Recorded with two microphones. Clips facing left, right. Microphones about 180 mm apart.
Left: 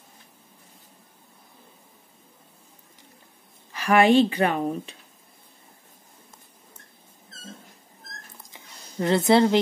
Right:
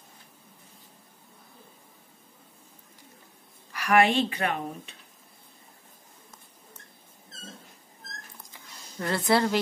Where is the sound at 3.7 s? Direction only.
30° left (ahead or behind).